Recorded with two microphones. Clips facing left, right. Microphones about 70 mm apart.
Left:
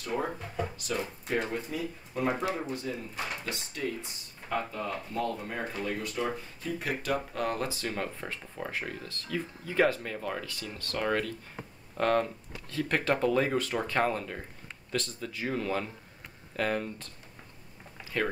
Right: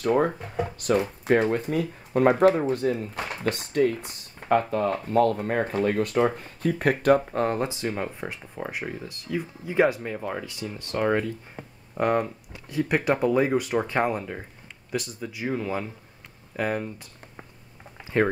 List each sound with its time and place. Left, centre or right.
0.0 s speech: right
7.2 s speech: right; by 17.1 s centre
18.0 s a sound: right